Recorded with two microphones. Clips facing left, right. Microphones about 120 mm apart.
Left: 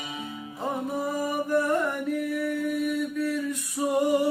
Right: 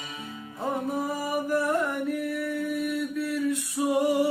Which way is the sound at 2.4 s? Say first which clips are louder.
Left 2 dB; centre (ahead or behind).